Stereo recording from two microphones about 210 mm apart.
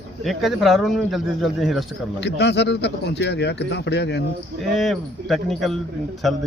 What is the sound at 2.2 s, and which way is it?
Speech, 55° left (ahead or behind).